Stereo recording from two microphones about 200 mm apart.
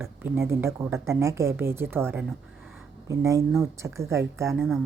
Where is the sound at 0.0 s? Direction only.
10° right (ahead or behind).